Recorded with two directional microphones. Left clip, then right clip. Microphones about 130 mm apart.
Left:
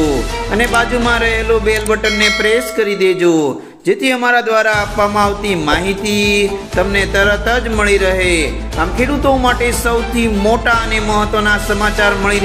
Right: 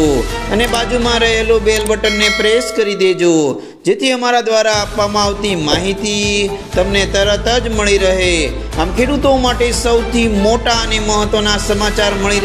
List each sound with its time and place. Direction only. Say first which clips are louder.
0.6 s speech: left 2 dB; 40° right (ahead or behind)
2.0 s speech: even; centre (ahead or behind)
2.4 s speech: right 1 dB; 40° right (ahead or behind)